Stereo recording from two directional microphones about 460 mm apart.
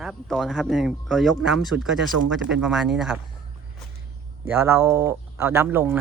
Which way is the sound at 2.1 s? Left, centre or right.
Right.